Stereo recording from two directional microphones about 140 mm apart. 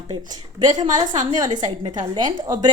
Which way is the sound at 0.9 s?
65° right (ahead or behind).